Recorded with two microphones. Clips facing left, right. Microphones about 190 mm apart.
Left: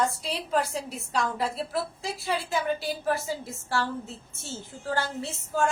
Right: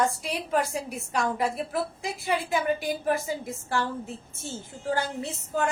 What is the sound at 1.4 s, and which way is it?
A woman's voice, 15° right (ahead or behind).